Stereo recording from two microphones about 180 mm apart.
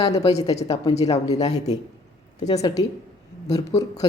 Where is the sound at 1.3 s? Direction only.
40° left (ahead or behind).